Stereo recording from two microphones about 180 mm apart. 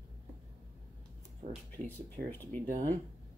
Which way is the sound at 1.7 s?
10° left (ahead or behind).